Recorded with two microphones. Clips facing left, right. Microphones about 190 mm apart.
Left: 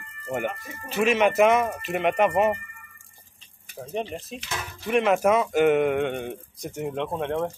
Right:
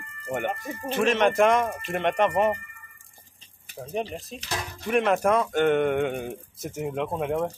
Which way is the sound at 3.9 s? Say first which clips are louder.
Even; centre (ahead or behind).